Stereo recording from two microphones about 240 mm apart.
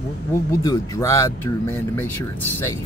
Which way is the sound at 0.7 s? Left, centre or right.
Centre.